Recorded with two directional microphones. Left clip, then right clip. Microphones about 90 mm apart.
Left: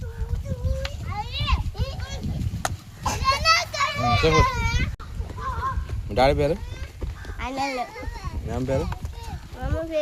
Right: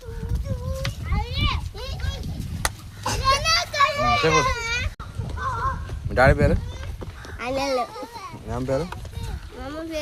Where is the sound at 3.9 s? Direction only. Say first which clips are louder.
Right 1 dB; centre (ahead or behind).